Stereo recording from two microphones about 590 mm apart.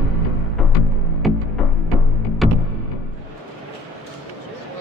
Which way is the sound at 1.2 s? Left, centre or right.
Centre.